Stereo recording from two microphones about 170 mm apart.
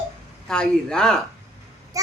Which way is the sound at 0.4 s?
5° left (ahead or behind).